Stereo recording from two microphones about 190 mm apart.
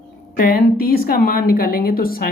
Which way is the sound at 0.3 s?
50° left (ahead or behind).